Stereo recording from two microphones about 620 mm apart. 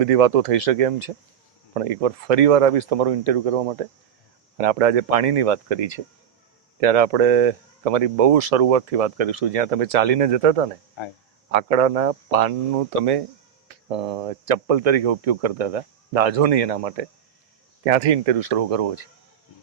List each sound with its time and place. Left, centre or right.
0.0 s speech: right
13.0 s speech: right